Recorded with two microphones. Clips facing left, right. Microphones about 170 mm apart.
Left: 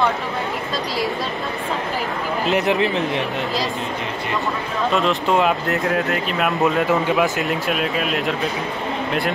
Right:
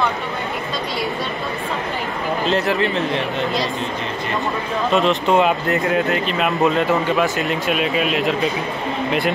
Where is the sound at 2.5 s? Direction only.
15° left (ahead or behind).